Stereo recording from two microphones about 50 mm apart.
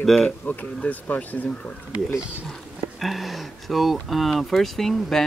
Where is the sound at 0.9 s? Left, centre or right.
Left.